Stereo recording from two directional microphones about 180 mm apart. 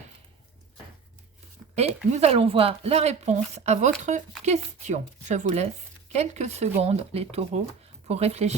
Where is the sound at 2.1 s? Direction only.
35° right (ahead or behind).